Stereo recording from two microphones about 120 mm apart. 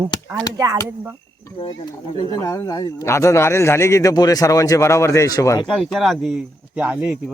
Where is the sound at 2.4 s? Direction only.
25° left (ahead or behind).